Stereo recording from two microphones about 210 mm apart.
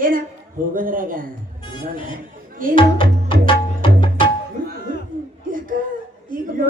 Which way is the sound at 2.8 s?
25° left (ahead or behind).